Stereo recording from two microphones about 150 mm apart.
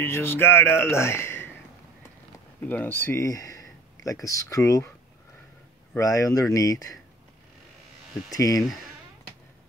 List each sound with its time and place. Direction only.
0.0 s speech: 15° left (ahead or behind)
2.6 s speech: 10° left (ahead or behind)
5.9 s speech: 20° left (ahead or behind)
8.3 s speech: 25° left (ahead or behind)